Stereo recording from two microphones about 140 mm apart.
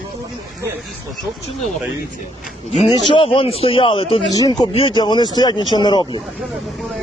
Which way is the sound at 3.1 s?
40° left (ahead or behind).